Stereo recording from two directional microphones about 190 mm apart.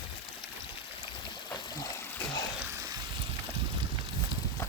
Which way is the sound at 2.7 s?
20° right (ahead or behind).